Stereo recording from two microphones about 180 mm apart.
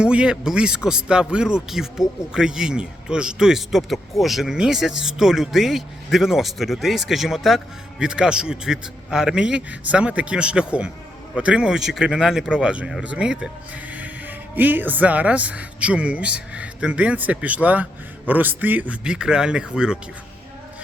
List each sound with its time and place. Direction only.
0.0 s speech: 5° right (ahead or behind)